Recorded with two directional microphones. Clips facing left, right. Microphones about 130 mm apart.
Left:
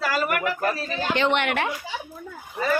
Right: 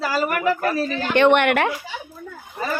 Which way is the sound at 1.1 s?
60° right (ahead or behind).